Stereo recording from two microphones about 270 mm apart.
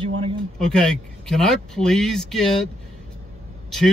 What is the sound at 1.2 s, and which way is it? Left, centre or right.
Speech, centre.